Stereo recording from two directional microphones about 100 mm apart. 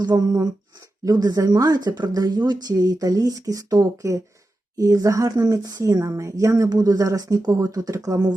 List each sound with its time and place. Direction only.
0.0 s speech: 45° right (ahead or behind)